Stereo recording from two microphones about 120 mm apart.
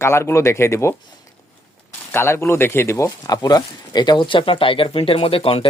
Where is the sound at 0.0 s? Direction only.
20° left (ahead or behind).